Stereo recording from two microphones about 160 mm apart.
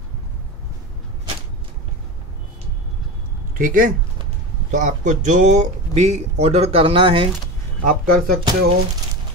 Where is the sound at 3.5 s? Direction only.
55° right (ahead or behind); by 7.3 s 35° right (ahead or behind).